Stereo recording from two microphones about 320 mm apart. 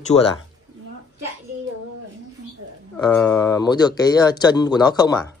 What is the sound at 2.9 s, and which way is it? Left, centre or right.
Speech, centre.